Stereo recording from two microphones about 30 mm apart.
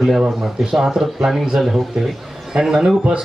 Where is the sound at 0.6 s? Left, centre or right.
Centre.